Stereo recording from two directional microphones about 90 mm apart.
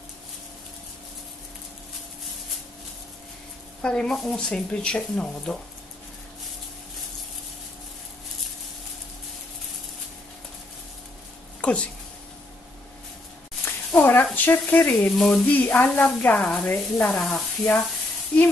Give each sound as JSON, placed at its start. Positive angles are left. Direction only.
{"t": 3.8, "sound": "speech", "side_deg": 10}
{"t": 11.6, "sound": "speech", "side_deg": 15}
{"t": 13.7, "sound": "a sound", "side_deg": 25}
{"t": 14.3, "sound": "speech", "side_deg": 20}
{"t": 15.0, "sound": "sizzle", "side_deg": 5}
{"t": 15.4, "sound": "speech", "side_deg": 20}
{"t": 16.3, "sound": "sizzle", "side_deg": 5}
{"t": 16.7, "sound": "speech", "side_deg": 15}
{"t": 17.2, "sound": "sizzle", "side_deg": 5}